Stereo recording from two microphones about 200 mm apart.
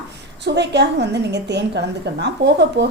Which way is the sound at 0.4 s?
60° right (ahead or behind).